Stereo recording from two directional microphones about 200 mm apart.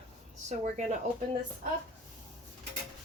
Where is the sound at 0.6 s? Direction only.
35° right (ahead or behind).